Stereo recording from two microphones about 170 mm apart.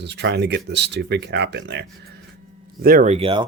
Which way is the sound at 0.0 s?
90° right.